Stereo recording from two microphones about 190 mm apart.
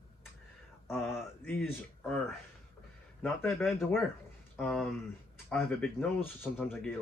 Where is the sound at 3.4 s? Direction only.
10° left (ahead or behind).